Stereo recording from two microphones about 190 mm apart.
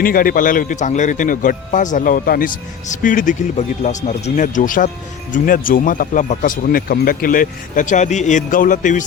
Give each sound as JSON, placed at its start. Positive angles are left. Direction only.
{"t": 0.0, "sound": "speech", "side_deg": 50}